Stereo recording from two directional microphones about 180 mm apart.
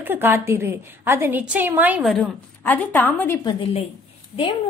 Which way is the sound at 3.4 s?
25° left (ahead or behind).